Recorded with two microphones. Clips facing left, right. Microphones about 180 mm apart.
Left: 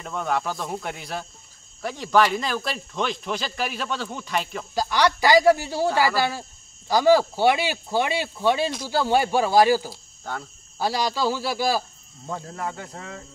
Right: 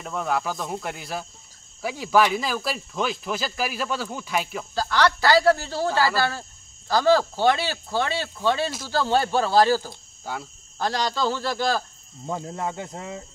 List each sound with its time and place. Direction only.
0.0 s speech: centre (ahead or behind)
4.7 s speech: 15° left (ahead or behind)
10.3 s speech: 5° right (ahead or behind)
10.8 s speech: 10° left (ahead or behind)
12.3 s speech: 20° right (ahead or behind)